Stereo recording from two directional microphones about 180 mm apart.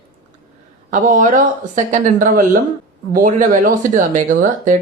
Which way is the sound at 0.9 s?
45° right (ahead or behind).